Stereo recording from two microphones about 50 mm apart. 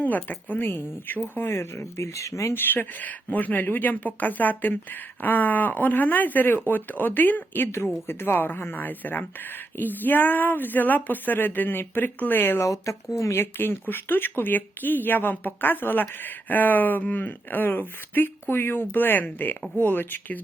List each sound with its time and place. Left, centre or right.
0.0 s speech: left
2.5 s speech: left
3.0 s speech: left
12.5 s speech: left
13.4 s speech: left